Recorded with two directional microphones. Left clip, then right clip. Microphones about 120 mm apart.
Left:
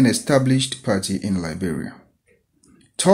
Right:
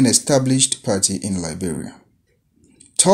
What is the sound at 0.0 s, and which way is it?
Speech, 30° right (ahead or behind).